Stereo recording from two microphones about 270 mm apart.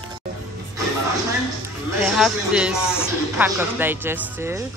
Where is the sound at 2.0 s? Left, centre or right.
Centre.